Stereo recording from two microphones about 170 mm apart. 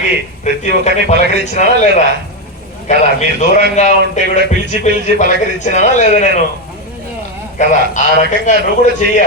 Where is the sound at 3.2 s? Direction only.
45° left (ahead or behind).